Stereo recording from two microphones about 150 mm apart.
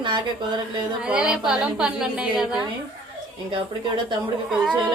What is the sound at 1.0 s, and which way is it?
A woman's voice, 5° right (ahead or behind).